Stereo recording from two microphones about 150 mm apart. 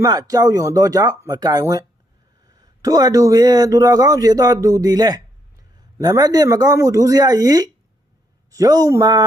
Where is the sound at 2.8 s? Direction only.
25° right (ahead or behind).